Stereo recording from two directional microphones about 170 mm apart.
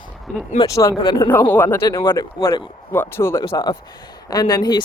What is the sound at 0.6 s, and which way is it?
Speech, 20° left (ahead or behind).